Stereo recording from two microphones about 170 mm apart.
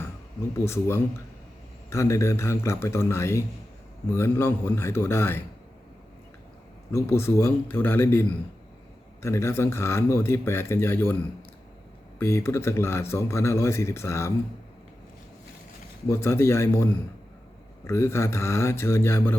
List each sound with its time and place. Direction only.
0.6 s speech: 15° left (ahead or behind)
6.9 s speech: 15° left (ahead or behind)
12.2 s speech: 15° left (ahead or behind)
16.0 s speech: 15° left (ahead or behind)